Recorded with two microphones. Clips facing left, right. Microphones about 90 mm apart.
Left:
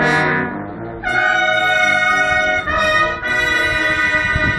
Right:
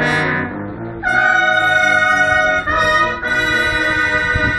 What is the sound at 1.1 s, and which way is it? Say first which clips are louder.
Brass instrument: right 2 dB; 20° right (ahead or behind).